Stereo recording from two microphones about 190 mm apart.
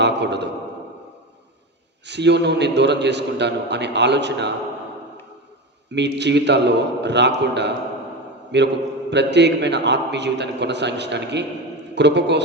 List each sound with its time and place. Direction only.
0.0 s a man's voice: 65° right (ahead or behind)
2.0 s a man's voice: 65° right (ahead or behind)
5.9 s a man's voice: 65° right (ahead or behind)